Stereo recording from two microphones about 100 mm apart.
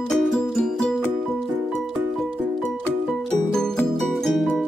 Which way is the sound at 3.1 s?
5° left (ahead or behind).